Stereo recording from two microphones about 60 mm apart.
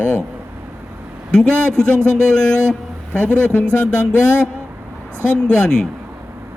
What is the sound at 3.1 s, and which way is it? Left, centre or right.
Speech, centre.